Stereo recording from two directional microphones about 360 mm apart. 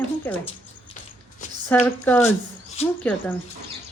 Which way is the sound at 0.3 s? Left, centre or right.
Centre.